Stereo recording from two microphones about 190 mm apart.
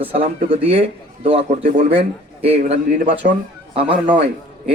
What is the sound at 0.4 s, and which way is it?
A man's voice, 30° right (ahead or behind).